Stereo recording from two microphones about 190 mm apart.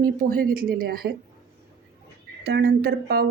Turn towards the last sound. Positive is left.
turn(degrees=-55)  # may be behind; listen again after turning